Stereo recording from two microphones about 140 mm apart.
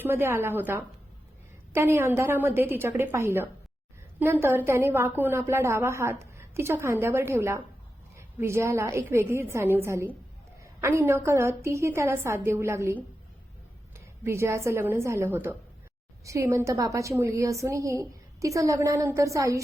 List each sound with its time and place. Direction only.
0.0 s a woman's voice: 15° right (ahead or behind)